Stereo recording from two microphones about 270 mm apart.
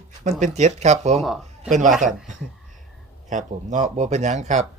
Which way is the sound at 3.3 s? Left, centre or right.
Right.